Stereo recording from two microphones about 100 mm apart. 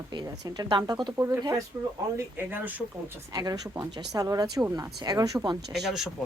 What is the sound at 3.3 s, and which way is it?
Speech, 40° right (ahead or behind).